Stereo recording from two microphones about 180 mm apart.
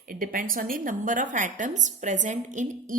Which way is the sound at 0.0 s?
50° right (ahead or behind).